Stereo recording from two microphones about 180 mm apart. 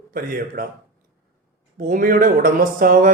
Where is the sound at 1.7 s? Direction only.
50° right (ahead or behind).